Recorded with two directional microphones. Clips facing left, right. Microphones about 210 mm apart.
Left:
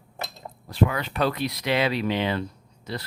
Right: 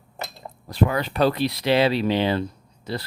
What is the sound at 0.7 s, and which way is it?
Speech, 35° right (ahead or behind).